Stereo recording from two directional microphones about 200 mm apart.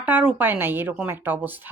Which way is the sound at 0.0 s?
10° right (ahead or behind).